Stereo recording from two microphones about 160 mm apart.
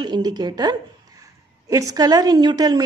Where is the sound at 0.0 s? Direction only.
25° right (ahead or behind).